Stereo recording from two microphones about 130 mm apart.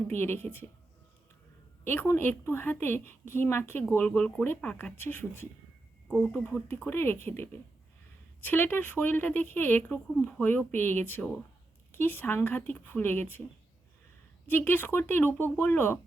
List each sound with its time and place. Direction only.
0.1 s speech: 15° left (ahead or behind)
1.8 s speech: 15° left (ahead or behind)
14.4 s speech: 15° left (ahead or behind)